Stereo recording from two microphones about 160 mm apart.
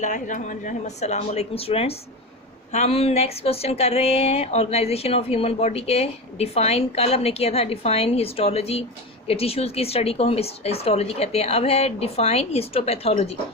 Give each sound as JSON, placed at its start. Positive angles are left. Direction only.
{"t": 0.0, "sound": "a woman's voice", "side_deg": 50}